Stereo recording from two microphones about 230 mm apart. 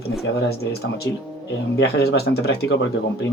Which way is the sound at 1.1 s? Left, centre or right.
Centre.